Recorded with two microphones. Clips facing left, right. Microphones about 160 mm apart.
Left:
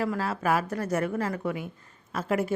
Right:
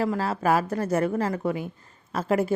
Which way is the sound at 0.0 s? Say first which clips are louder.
Right 3 dB; 30° right (ahead or behind).